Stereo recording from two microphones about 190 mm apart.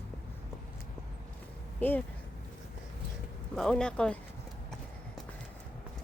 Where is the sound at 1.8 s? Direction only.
10° left (ahead or behind).